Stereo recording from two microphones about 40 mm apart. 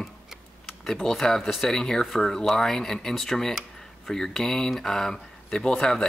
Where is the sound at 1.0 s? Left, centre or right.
Centre.